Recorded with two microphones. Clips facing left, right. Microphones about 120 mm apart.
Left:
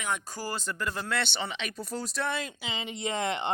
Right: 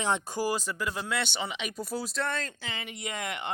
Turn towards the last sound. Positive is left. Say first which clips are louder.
# left 5 dB
turn(degrees=30)  # may be behind; listen again after turning